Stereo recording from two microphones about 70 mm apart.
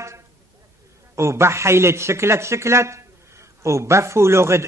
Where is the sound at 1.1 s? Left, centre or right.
Right.